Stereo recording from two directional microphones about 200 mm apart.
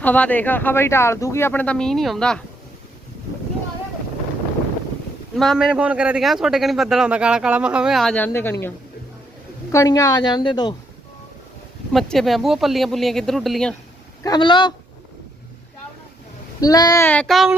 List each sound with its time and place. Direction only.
0.0 s speech: 10° left (ahead or behind)
5.4 s a man's voice: centre (ahead or behind)
9.7 s a woman's voice: 15° left (ahead or behind)
11.9 s a man's voice: centre (ahead or behind)
14.3 s a woman's voice: 20° left (ahead or behind)
16.6 s speech: 20° left (ahead or behind); by 17.5 s centre (ahead or behind)